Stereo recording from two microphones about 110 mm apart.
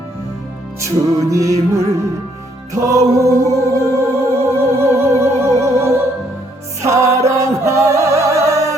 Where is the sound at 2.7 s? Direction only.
30° right (ahead or behind).